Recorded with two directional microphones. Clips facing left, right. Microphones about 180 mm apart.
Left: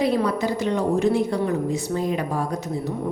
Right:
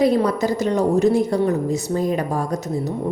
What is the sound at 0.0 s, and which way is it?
A woman's voice, 40° right (ahead or behind).